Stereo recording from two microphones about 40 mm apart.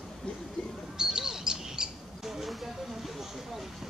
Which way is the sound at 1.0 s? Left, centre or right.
Centre.